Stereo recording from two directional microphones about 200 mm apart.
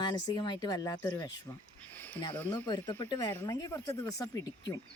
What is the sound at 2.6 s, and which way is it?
Speech, 20° left (ahead or behind).